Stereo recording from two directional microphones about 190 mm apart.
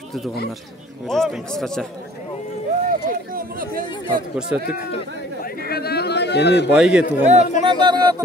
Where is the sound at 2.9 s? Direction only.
50° right (ahead or behind).